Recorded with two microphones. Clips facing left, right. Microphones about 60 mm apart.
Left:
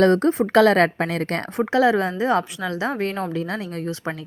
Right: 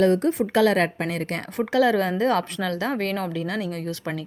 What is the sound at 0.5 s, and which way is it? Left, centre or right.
Speech, left.